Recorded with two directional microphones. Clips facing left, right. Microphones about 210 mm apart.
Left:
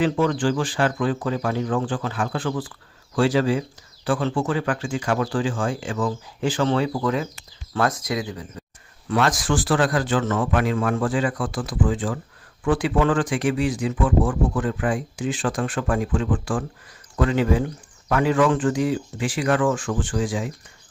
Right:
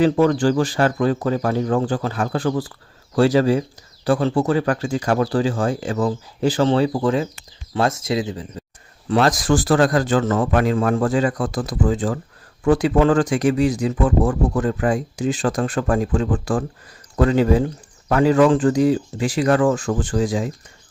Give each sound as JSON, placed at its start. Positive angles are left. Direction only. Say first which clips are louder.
{"t": 0.0, "sound": "speech", "louder": "right 5 dB", "side_deg": -40}